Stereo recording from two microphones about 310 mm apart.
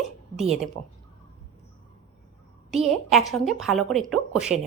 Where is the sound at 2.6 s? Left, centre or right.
Centre.